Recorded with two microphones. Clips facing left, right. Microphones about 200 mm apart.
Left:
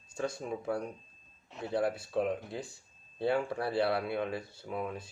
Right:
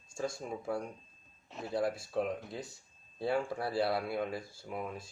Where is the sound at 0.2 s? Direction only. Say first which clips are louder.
Left 2 dB; 65° left (ahead or behind).